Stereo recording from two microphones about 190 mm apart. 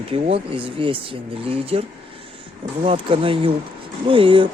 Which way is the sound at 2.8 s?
30° right (ahead or behind).